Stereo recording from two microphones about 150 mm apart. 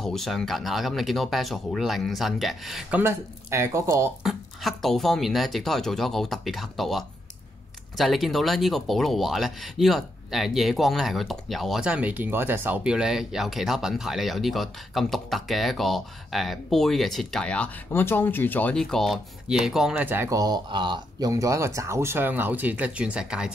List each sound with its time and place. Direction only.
0.0 s speech: centre (ahead or behind)
3.0 s speech: 15° right (ahead or behind)
4.2 s speech: centre (ahead or behind)